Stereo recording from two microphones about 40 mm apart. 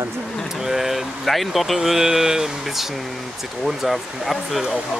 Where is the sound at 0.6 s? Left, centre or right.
Centre.